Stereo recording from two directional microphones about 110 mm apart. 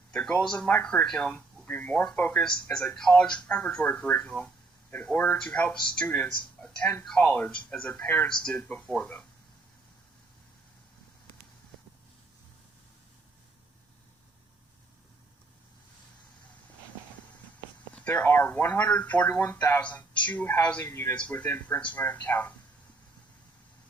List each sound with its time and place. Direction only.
0.1 s speech: 10° left (ahead or behind)
17.9 s a man's voice: 15° left (ahead or behind)